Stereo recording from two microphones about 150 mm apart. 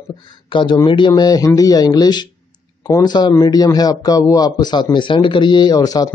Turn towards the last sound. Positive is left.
turn(degrees=25)  # may be behind; listen again after turning